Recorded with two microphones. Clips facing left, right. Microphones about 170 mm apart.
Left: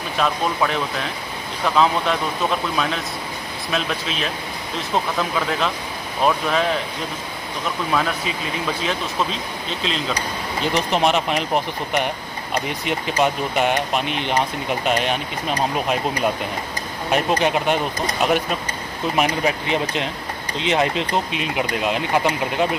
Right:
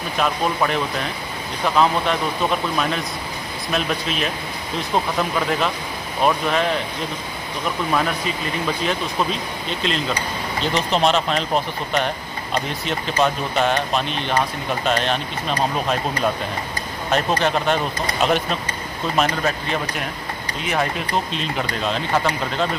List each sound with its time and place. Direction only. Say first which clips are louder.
0.2 s speech: even; centre (ahead or behind)
3.7 s speech: right 2 dB; centre (ahead or behind)
8.8 s speech: right 2 dB; centre (ahead or behind)
10.6 s speech: even; 15° left (ahead or behind)